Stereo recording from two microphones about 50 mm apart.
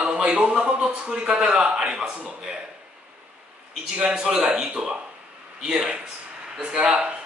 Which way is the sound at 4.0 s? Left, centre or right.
Centre.